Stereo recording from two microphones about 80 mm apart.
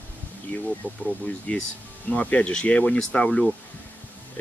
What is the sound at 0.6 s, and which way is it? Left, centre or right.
Speech, centre.